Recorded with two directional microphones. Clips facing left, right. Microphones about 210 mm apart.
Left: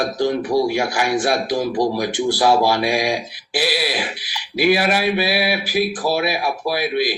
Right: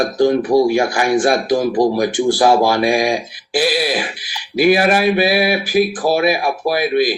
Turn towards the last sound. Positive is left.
turn(degrees=-50)  # may be behind; listen again after turning